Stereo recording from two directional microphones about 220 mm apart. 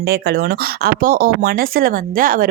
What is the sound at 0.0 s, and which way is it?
Speech, 50° right (ahead or behind).